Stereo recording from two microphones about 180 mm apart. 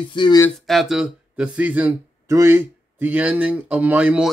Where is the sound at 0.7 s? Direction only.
Centre (ahead or behind).